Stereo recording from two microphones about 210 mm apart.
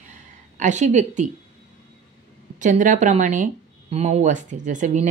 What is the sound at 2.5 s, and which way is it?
Speech, 35° right (ahead or behind).